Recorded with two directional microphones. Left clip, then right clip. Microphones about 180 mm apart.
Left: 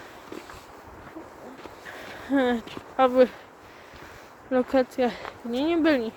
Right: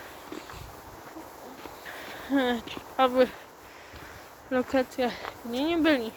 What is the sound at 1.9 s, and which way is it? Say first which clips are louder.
Speech: left 2 dB; 40° left (ahead or behind).